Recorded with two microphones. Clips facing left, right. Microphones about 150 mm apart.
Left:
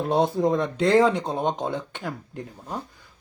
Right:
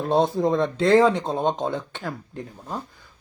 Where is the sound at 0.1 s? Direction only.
10° left (ahead or behind).